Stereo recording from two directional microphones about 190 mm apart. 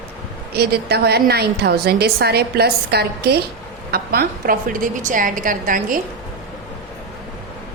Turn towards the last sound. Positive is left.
turn(degrees=-45)  # may be behind; listen again after turning